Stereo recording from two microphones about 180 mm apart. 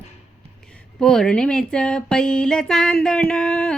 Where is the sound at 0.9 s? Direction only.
5° left (ahead or behind).